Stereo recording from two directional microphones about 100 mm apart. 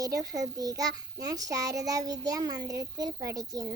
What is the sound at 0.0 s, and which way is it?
A child's voice, 35° right (ahead or behind).